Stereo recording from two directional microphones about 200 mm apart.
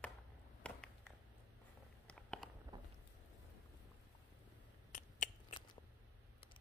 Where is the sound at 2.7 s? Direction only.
20° right (ahead or behind).